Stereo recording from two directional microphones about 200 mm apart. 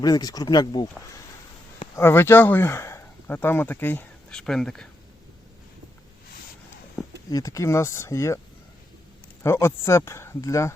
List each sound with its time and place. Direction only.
0.0 s speech: 20° left (ahead or behind)
2.0 s speech: 10° left (ahead or behind)
7.3 s speech: 15° left (ahead or behind)
9.4 s speech: 15° left (ahead or behind)